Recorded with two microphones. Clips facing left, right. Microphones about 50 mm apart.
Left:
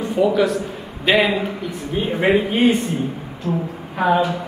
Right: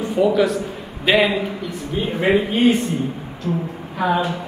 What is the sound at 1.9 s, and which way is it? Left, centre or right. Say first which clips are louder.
Speech: left 1 dB; centre.